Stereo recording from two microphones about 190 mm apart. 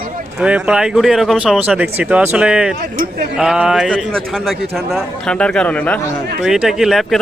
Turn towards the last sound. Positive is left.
turn(degrees=0)  # may be behind; listen again after turning